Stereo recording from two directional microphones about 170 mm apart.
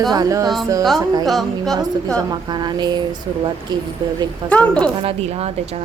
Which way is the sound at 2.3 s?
25° right (ahead or behind).